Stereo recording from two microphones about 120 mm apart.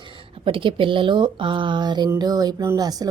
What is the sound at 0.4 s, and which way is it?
A woman's voice, 45° right (ahead or behind).